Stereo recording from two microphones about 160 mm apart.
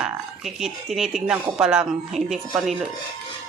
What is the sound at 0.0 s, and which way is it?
Speech, centre (ahead or behind).